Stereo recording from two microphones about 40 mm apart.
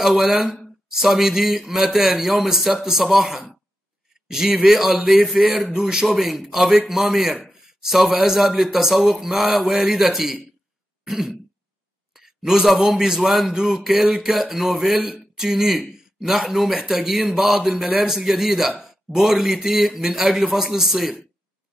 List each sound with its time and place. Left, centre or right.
0.2 s speech: centre
4.6 s speech: centre
5.7 s speech: centre
6.0 s a man's voice: centre
8.4 s a man's voice: centre